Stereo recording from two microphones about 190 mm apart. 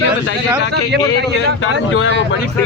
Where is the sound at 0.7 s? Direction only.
60° right (ahead or behind).